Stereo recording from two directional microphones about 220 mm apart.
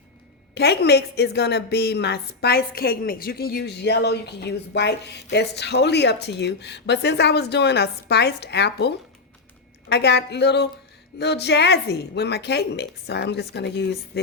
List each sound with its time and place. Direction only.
0.5 s a woman's voice: 50° left (ahead or behind)